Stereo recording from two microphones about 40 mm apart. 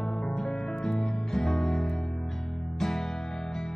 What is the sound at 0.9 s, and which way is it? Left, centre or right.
Music, centre.